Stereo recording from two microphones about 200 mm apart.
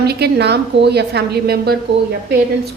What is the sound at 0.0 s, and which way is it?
A woman's voice, 55° right (ahead or behind).